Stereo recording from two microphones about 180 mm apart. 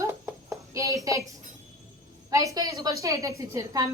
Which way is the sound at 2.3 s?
20° right (ahead or behind).